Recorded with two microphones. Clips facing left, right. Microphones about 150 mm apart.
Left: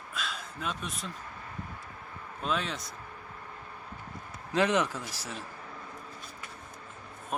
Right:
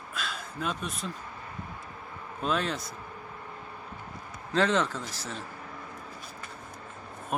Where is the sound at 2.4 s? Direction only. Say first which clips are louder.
Right 3 dB; centre (ahead or behind).